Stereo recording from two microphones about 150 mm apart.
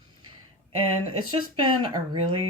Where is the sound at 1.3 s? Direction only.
30° right (ahead or behind).